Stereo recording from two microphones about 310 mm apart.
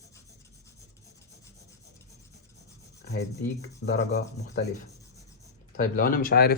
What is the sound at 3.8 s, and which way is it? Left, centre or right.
Rub, left.